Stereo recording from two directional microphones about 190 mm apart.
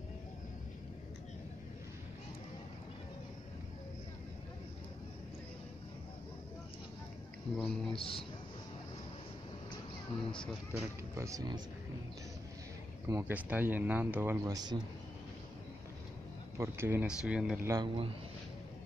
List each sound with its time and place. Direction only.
7.5 s speech: 5° left (ahead or behind)
7.9 s a man's voice: 30° left (ahead or behind)
10.7 s speech: 15° right (ahead or behind)
13.1 s speech: 10° right (ahead or behind)
16.5 s speech: 15° right (ahead or behind)
17.6 s a man's voice: 25° right (ahead or behind)